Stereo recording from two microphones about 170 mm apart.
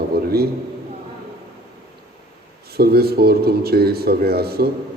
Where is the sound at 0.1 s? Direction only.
65° right (ahead or behind).